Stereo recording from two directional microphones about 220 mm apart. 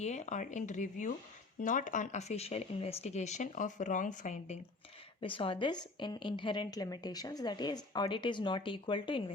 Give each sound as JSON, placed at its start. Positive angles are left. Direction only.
{"t": 0.0, "sound": "speech", "side_deg": 30}
{"t": 5.2, "sound": "a woman's voice", "side_deg": 25}